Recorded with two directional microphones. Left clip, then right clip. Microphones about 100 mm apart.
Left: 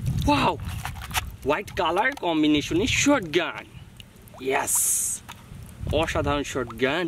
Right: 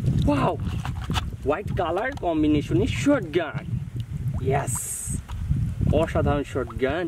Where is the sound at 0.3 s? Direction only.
40° left (ahead or behind).